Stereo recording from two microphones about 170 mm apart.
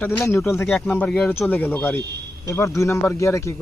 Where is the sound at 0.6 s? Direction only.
Centre (ahead or behind).